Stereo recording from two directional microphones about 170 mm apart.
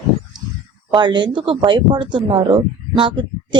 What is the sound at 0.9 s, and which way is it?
Speech, 25° right (ahead or behind).